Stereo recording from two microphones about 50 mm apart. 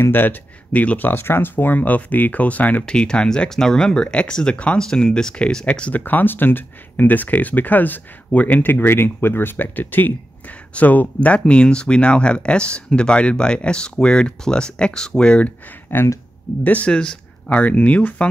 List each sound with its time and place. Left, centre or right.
0.0 s speech: left
2.8 s speech: centre
5.9 s speech: left
15.9 s speech: left
16.9 s speech: centre
17.6 s speech: left